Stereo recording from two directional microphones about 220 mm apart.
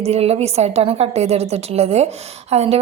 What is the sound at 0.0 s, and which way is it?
A woman's voice, 30° right (ahead or behind).